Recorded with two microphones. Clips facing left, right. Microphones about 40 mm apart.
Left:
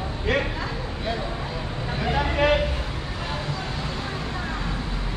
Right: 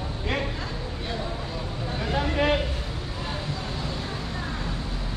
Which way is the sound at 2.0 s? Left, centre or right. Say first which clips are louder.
Left 2 dB; left.